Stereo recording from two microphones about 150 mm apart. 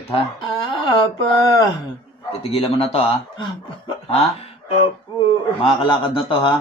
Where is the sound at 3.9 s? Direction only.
40° left (ahead or behind).